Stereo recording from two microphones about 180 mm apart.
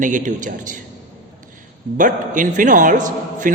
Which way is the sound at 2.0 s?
45° right (ahead or behind).